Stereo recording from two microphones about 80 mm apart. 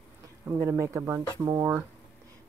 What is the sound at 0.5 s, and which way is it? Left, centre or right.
Speech, right.